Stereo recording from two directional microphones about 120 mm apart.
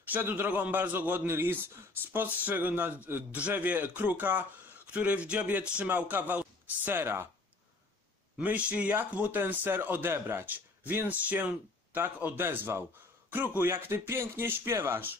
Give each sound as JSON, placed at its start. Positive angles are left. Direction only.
{"t": 0.1, "sound": "speech", "side_deg": -15}
{"t": 8.4, "sound": "speech", "side_deg": -10}